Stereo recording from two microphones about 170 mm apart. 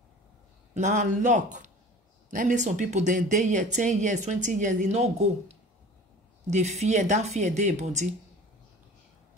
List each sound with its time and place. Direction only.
0.7 s speech: 45° right (ahead or behind)
6.4 s speech: 40° right (ahead or behind)